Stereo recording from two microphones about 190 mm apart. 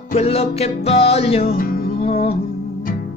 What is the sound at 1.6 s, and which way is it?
Music, 50° left (ahead or behind).